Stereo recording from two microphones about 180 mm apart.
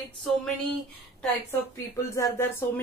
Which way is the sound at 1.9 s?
15° left (ahead or behind).